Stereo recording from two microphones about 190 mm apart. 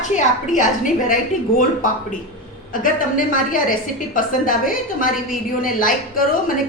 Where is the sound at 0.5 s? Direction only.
45° left (ahead or behind).